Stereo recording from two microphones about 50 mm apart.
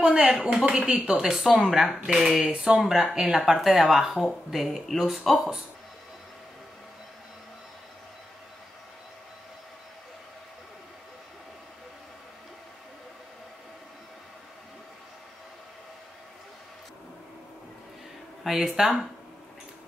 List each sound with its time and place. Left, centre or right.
0.0 s speech: right
0.4 s speech: centre
18.4 s speech: centre